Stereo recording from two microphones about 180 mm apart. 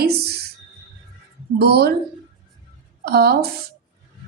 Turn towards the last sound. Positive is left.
turn(degrees=-60)  # may be behind; listen again after turning